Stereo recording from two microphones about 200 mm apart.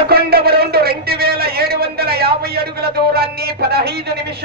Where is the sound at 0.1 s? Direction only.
50° right (ahead or behind).